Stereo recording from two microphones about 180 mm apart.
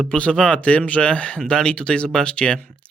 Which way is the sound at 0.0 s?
5° left (ahead or behind).